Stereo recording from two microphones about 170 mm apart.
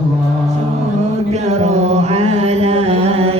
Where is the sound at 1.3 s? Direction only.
40° right (ahead or behind).